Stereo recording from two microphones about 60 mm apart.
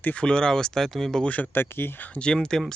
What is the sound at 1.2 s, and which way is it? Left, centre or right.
Speech, left.